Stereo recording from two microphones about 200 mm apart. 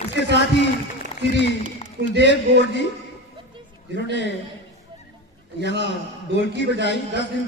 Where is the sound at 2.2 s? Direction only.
60° left (ahead or behind).